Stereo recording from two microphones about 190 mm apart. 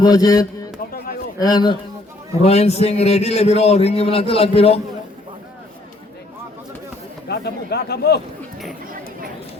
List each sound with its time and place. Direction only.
0.0 s a man's voice: 20° left (ahead or behind)
0.9 s a sound: 50° left (ahead or behind)
1.4 s a man's voice: 20° left (ahead or behind)
2.4 s a man's voice: 35° left (ahead or behind)
7.3 s a man's voice: 60° left (ahead or behind)